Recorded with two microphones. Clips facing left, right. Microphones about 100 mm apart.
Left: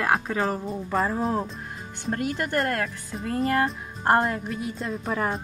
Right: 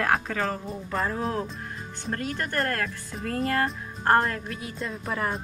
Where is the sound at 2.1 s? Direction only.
15° left (ahead or behind).